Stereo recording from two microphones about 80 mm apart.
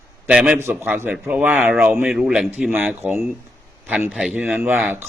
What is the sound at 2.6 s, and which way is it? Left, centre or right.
Speech, right.